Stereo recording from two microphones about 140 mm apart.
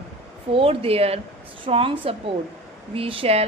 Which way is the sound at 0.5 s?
40° right (ahead or behind).